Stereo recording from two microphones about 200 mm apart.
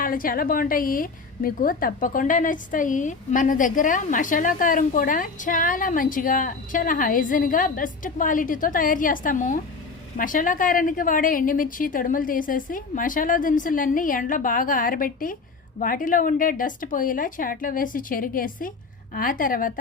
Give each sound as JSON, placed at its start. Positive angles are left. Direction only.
{"t": 0.0, "sound": "a woman's voice", "side_deg": 45}